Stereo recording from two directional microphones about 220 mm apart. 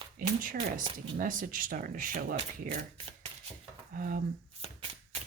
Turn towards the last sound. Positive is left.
turn(degrees=-25)  # may be behind; listen again after turning